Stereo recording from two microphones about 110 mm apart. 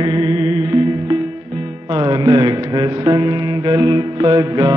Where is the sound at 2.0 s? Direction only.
40° right (ahead or behind).